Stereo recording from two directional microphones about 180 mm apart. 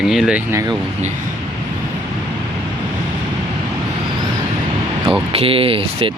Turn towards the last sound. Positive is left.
turn(degrees=-30)  # may be behind; listen again after turning